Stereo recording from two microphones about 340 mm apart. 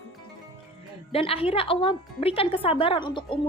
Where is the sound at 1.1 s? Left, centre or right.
Centre.